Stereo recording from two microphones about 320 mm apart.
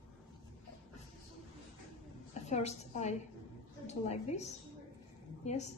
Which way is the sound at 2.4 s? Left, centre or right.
Left.